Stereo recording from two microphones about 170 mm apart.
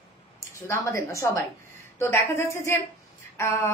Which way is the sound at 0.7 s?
15° left (ahead or behind).